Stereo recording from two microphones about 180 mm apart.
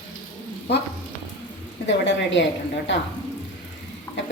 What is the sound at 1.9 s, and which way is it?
A woman's voice, 85° left.